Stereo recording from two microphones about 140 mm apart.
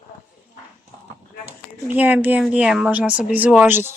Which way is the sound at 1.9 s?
10° right (ahead or behind).